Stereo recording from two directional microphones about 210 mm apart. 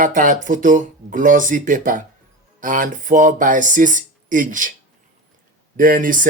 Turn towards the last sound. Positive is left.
turn(degrees=-40)  # may be behind; listen again after turning